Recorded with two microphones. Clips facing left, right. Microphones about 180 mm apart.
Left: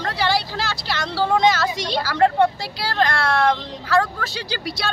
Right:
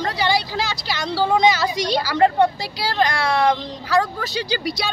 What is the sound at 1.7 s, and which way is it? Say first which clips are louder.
Speech: right 3 dB; 25° left (ahead or behind).